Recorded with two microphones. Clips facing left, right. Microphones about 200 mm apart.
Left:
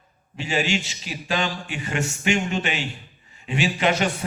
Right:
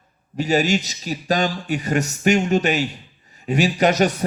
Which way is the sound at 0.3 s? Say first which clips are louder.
Right 6 dB; 40° right (ahead or behind).